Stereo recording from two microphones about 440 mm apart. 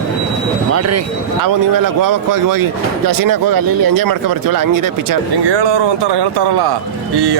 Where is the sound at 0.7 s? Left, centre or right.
Right.